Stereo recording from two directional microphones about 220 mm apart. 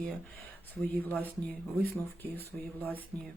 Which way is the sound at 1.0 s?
10° left (ahead or behind).